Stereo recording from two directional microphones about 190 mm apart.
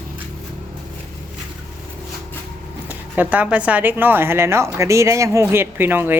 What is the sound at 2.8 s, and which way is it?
Speech, 10° right (ahead or behind).